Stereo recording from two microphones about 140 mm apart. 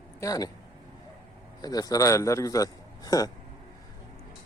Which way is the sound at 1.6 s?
25° left (ahead or behind).